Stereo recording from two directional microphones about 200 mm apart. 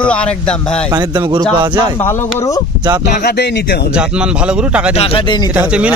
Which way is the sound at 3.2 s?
55° left (ahead or behind).